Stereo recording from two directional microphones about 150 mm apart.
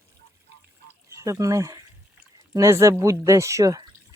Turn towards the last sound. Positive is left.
turn(degrees=-25)  # may be behind; listen again after turning